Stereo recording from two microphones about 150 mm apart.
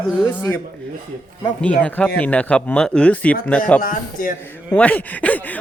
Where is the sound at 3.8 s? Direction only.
65° left (ahead or behind).